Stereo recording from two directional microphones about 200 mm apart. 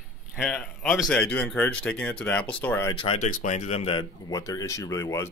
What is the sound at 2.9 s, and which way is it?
Speech, 25° left (ahead or behind).